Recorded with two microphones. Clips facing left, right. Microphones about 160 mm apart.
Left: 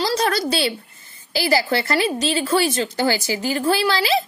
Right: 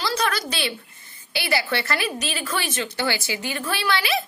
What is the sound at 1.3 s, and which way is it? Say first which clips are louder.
A woman's voice: left 5 dB; 35° left (ahead or behind).